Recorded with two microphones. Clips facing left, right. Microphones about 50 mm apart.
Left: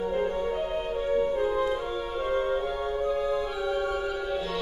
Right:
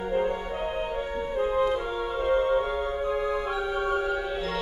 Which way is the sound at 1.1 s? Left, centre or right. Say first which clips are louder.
Left 2 dB; centre.